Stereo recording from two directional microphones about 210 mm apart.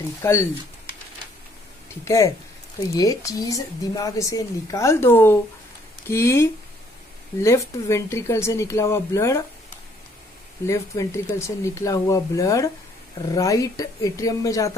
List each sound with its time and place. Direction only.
0.2 s a woman's voice: 15° left (ahead or behind)
2.0 s a woman's voice: 15° left (ahead or behind)
10.7 s a woman's voice: 15° left (ahead or behind)